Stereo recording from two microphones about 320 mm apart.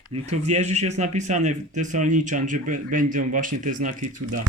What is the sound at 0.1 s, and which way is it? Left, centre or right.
Speech, right.